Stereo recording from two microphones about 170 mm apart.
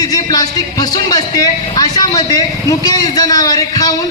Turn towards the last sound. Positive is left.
turn(degrees=20)  # may be behind; listen again after turning